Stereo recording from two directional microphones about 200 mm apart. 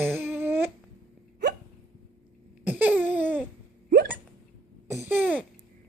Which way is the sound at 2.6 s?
5° right (ahead or behind).